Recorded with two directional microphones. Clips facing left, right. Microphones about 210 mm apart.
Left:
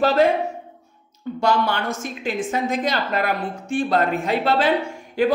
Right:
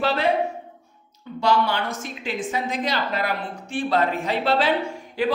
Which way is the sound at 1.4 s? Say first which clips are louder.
Left 1 dB; 50° left (ahead or behind).